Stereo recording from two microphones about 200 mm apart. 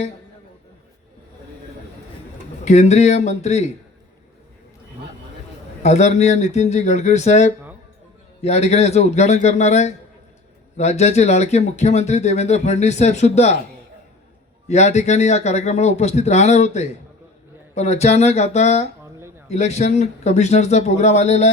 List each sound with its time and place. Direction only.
2.6 s speech: 35° left (ahead or behind)
5.8 s speech: 35° left (ahead or behind)
14.7 s speech: 35° left (ahead or behind)